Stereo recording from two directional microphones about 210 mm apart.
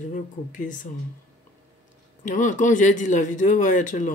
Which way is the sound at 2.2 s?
35° left (ahead or behind).